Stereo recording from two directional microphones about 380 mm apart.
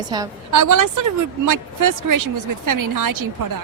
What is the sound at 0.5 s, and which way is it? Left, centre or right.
A woman's voice, right.